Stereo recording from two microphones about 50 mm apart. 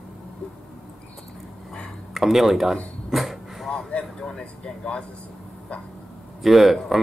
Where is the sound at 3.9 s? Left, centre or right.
Centre.